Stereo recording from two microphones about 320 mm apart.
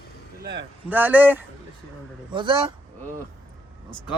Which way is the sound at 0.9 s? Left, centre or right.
Centre.